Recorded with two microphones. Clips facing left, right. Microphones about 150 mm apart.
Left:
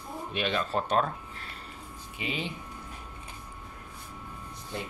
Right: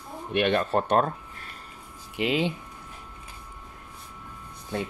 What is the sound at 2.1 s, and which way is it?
Speech, 90° right.